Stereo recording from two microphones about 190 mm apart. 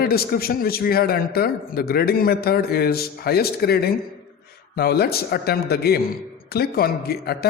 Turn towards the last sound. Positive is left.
turn(degrees=55)  # may be behind; listen again after turning